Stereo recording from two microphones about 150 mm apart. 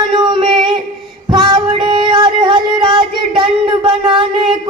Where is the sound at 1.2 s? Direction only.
30° right (ahead or behind).